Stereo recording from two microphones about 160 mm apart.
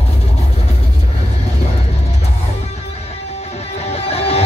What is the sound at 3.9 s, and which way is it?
Music, 40° left (ahead or behind).